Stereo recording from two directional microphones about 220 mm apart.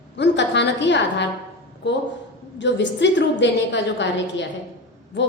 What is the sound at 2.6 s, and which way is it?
A woman's voice, 55° left (ahead or behind).